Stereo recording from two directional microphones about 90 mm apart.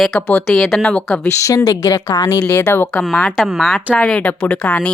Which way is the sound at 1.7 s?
40° left (ahead or behind).